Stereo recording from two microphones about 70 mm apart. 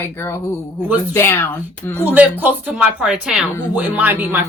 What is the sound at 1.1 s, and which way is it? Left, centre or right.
Speech, left.